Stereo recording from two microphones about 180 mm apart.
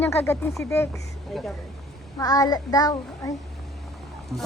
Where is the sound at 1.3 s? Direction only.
Centre (ahead or behind).